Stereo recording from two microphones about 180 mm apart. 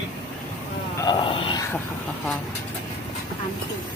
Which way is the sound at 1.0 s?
25° left (ahead or behind).